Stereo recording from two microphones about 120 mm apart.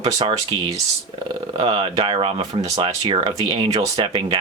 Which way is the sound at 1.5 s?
50° right (ahead or behind).